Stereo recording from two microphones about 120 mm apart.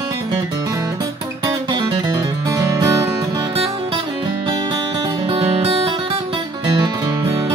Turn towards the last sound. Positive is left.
turn(degrees=-55)  # may be behind; listen again after turning